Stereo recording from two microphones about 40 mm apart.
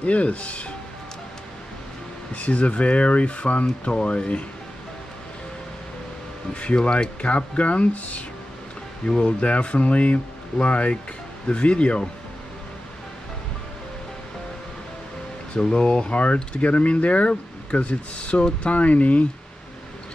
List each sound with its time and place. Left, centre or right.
0.0 s speech: left
2.3 s speech: left
6.5 s speech: left
9.2 s speech: left
15.6 s speech: left